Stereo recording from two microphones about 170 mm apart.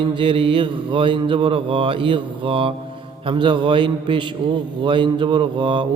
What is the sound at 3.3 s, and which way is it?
Mantra, 30° right (ahead or behind).